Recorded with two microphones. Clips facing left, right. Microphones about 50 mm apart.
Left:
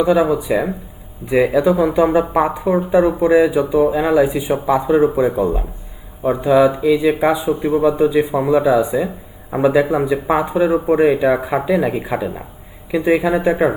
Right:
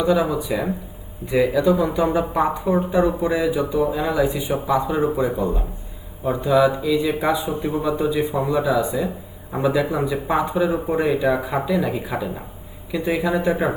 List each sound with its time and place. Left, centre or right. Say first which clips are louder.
0.0 s speech: left 5 dB; left